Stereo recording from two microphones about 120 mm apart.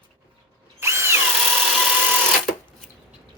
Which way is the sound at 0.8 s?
20° right (ahead or behind).